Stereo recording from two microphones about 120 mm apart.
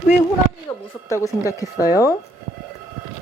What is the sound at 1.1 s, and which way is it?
Speech, 25° left (ahead or behind).